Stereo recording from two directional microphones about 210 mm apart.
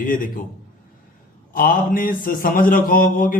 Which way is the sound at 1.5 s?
40° left (ahead or behind).